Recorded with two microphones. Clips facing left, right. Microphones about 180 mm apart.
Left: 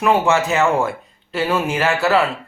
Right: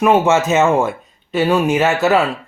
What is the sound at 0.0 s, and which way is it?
Speech, 20° right (ahead or behind).